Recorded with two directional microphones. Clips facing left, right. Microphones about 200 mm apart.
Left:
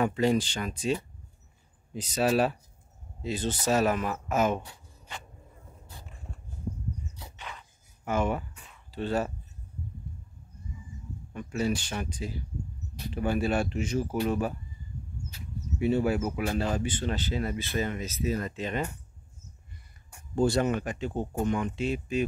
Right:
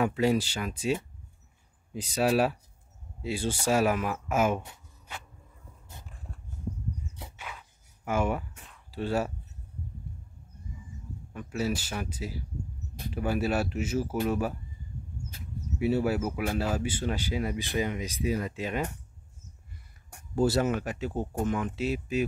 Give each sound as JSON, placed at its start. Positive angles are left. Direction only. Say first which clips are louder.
{"t": 0.0, "sound": "speech", "louder": "even", "side_deg": -5}
{"t": 2.0, "sound": "speech", "louder": "even", "side_deg": -10}
{"t": 7.3, "sound": "a sound", "louder": "even", "side_deg": -5}
{"t": 9.0, "sound": "speech", "louder": "even", "side_deg": -10}
{"t": 11.3, "sound": "speech", "louder": "left 1 dB", "side_deg": -5}
{"t": 15.3, "sound": "a sound", "louder": "even", "side_deg": -50}
{"t": 15.8, "sound": "speech", "louder": "left 1 dB", "side_deg": -5}
{"t": 20.3, "sound": "speech", "louder": "even", "side_deg": -5}